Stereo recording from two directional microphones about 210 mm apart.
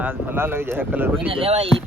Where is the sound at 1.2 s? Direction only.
25° right (ahead or behind).